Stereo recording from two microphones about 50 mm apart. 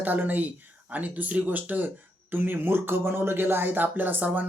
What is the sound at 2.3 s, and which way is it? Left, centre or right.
Speech, right.